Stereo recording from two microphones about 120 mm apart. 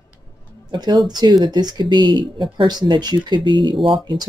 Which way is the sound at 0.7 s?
35° right (ahead or behind).